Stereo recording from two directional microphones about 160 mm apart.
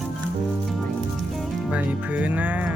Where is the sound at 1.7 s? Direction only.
10° right (ahead or behind).